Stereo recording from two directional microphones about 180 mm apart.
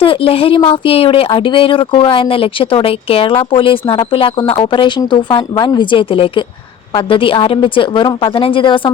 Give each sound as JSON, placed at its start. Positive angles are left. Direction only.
{"t": 0.0, "sound": "speech", "side_deg": 30}